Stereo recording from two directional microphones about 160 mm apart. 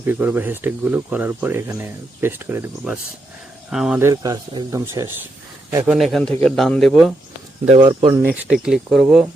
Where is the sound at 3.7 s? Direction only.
5° right (ahead or behind).